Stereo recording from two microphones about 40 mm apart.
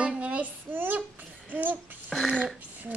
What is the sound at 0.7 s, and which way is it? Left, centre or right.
A woman's voice, right.